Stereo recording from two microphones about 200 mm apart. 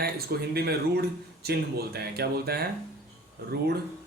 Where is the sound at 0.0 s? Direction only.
50° right (ahead or behind).